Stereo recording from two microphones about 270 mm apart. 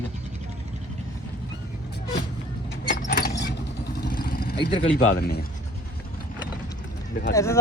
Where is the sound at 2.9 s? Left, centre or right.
Left.